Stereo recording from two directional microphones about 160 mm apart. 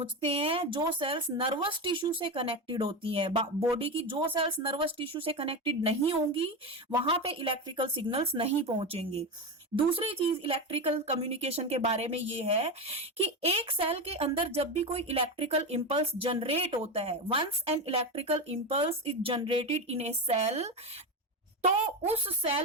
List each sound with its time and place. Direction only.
0.0 s speech: 35° right (ahead or behind)
22.3 s speech: 35° right (ahead or behind)